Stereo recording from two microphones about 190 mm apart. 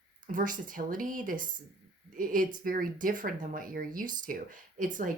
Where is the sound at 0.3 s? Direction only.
45° right (ahead or behind).